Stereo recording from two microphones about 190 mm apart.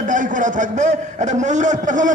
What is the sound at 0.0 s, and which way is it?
A man's voice, 40° right (ahead or behind).